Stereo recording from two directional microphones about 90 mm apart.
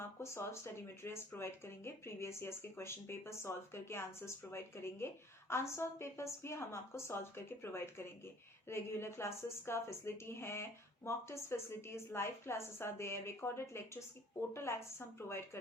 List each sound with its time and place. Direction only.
0.0 s speech: 30° left (ahead or behind)